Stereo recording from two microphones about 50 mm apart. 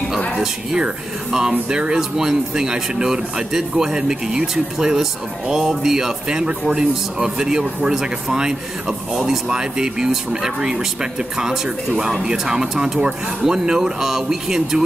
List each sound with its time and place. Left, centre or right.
0.3 s speech: centre